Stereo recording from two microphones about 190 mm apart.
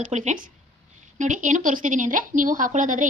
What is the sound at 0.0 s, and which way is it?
A woman's voice, 40° right (ahead or behind).